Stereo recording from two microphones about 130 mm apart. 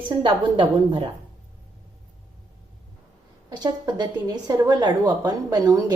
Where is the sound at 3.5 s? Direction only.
35° right (ahead or behind).